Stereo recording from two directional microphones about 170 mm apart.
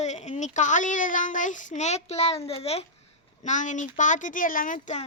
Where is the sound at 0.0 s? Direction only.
40° left (ahead or behind).